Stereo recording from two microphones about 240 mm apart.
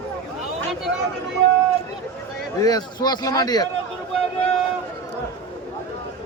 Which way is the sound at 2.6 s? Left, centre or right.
Centre.